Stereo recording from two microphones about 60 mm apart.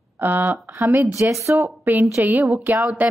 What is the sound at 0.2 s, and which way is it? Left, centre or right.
Speech, right.